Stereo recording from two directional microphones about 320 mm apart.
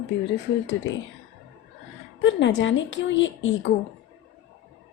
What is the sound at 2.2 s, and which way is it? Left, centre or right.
A woman's voice, left.